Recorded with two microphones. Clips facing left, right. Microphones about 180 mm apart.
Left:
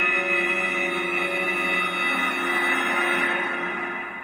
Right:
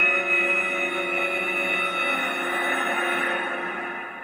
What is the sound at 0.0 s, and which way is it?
Music, 55° right (ahead or behind).